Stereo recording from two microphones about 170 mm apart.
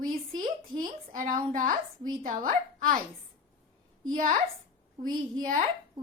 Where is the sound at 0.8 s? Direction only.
50° right (ahead or behind).